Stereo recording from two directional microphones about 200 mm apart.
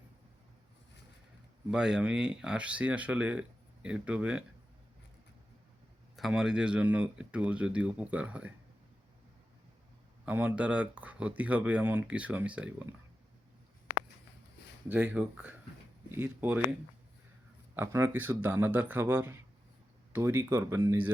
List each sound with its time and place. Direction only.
1.7 s speech: 5° right (ahead or behind)
6.1 s speech: centre (ahead or behind)
10.2 s speech: 5° right (ahead or behind)
14.8 s speech: 10° right (ahead or behind)
17.7 s speech: 10° right (ahead or behind)